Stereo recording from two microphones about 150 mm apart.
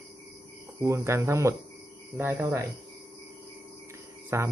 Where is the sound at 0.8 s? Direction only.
20° right (ahead or behind).